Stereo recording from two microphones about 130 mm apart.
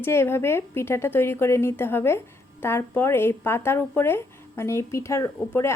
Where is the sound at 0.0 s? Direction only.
20° left (ahead or behind).